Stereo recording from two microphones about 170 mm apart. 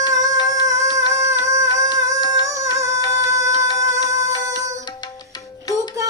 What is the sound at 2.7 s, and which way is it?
Music, 20° right (ahead or behind).